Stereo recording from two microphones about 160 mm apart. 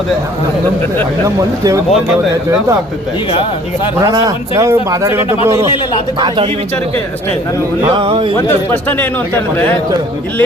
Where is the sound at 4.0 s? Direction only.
20° right (ahead or behind).